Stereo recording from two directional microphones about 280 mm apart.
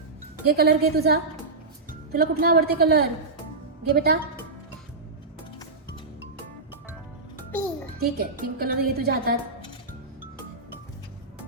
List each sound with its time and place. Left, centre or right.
0.4 s a woman's voice: right
8.0 s a woman's voice: right